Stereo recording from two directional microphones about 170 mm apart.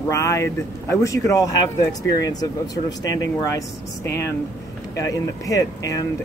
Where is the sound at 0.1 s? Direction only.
15° left (ahead or behind).